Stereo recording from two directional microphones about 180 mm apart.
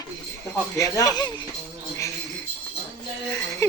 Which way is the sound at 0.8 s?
20° left (ahead or behind).